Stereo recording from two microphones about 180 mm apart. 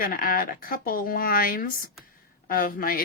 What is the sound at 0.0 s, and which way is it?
Speech, 55° left (ahead or behind).